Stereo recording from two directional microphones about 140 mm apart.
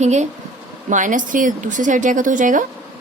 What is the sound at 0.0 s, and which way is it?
A woman's voice, 55° right (ahead or behind).